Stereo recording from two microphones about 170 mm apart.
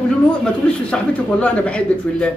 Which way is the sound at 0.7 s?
5° left (ahead or behind).